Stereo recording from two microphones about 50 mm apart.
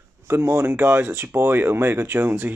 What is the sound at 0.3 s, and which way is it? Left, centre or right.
Speech, right.